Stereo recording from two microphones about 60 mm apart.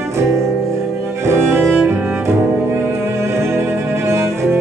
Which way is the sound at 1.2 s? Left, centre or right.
Right.